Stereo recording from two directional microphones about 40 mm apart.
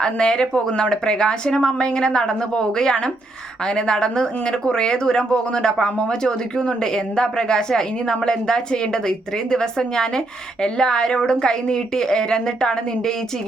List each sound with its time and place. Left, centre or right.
0.0 s speech: left